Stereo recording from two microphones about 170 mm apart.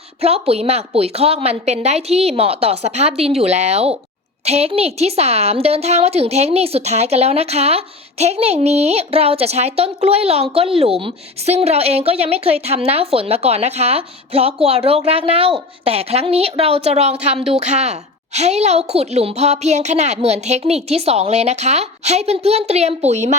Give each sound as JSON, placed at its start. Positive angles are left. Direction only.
{"t": 0.2, "sound": "a woman's voice", "side_deg": -35}